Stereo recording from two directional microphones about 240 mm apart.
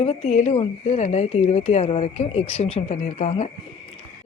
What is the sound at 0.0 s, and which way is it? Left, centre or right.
A woman's voice, left.